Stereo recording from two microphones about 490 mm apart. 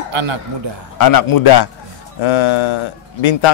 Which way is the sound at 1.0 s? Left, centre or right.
Left.